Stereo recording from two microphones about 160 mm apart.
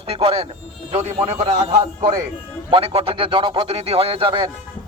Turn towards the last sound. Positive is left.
turn(degrees=-30)  # may be behind; listen again after turning